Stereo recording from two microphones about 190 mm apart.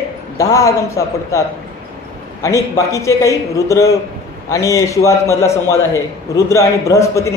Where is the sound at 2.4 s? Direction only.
15° left (ahead or behind).